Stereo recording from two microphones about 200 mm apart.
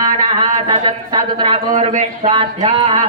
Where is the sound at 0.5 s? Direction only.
35° right (ahead or behind).